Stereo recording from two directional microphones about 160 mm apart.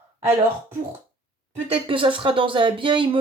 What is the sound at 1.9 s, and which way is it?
Speech, 30° right (ahead or behind).